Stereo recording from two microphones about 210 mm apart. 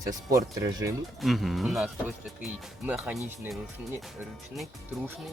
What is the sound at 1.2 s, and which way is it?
Speech, centre (ahead or behind).